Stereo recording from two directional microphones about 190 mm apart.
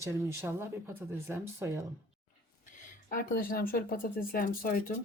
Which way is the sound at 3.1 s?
45° left (ahead or behind).